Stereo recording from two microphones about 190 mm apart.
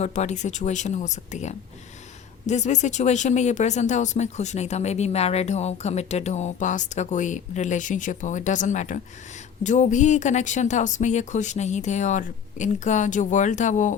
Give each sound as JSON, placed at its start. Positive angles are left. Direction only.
{"t": 0.0, "sound": "speech", "side_deg": 35}